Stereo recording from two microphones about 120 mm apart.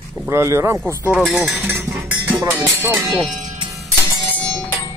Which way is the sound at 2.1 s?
15° right (ahead or behind).